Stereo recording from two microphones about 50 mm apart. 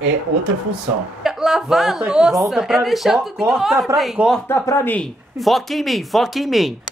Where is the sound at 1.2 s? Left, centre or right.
Centre.